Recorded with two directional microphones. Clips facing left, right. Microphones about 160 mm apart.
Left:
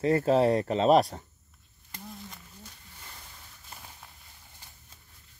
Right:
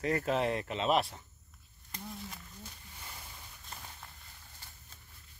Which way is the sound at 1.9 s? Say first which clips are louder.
Even; centre (ahead or behind).